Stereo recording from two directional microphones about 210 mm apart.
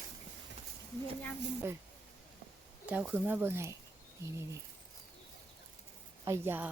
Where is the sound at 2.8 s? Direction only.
5° right (ahead or behind).